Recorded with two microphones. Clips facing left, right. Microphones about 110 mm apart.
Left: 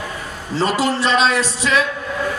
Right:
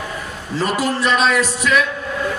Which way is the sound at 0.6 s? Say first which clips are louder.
Left 1 dB; 25° left (ahead or behind).